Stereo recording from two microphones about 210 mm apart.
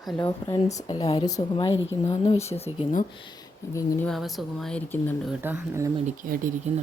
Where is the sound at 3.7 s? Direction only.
15° left (ahead or behind).